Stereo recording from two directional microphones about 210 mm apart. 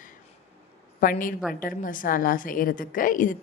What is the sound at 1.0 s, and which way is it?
A woman's voice, 40° left (ahead or behind).